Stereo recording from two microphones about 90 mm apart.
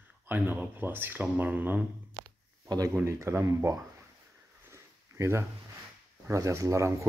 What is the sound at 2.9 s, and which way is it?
Speech, 30° right (ahead or behind).